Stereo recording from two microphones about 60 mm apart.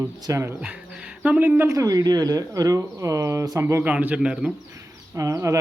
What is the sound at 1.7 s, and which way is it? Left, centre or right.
Speech, right.